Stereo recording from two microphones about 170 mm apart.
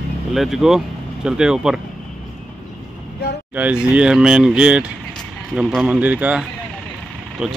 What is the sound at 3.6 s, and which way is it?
Speech, 10° right (ahead or behind).